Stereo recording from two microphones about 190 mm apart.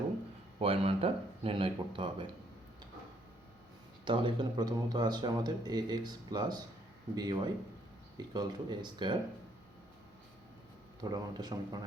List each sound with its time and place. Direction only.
0.6 s a man's voice: 30° right (ahead or behind)
4.0 s a man's voice: 25° right (ahead or behind)
11.0 s a man's voice: 20° right (ahead or behind)